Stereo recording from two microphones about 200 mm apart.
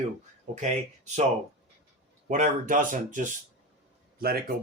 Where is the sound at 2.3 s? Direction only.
40° right (ahead or behind).